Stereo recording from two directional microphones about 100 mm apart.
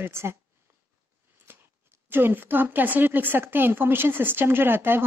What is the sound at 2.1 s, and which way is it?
Speech, 20° right (ahead or behind).